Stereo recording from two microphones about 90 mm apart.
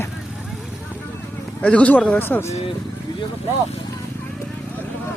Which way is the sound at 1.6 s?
15° left (ahead or behind).